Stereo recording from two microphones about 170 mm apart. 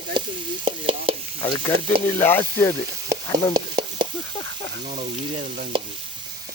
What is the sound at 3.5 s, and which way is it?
Stir, 25° right (ahead or behind).